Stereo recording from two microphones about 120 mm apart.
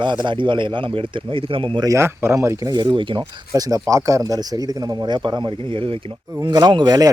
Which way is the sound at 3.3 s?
30° right (ahead or behind).